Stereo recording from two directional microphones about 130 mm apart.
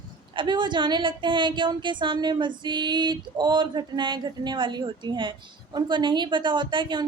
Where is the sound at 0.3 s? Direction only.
35° right (ahead or behind).